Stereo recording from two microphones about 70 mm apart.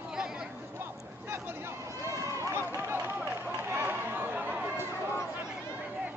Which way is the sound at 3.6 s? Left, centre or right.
Right.